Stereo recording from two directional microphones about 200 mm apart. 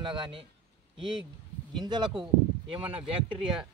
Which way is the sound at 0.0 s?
25° right (ahead or behind).